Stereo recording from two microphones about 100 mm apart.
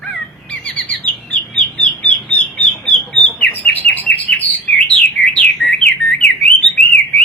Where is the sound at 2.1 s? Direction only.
10° left (ahead or behind).